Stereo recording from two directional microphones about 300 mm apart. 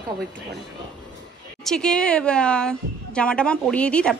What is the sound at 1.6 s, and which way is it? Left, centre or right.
A woman's voice, centre.